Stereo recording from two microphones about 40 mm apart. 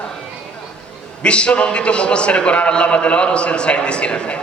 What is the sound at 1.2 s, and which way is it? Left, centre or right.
A man's voice, left.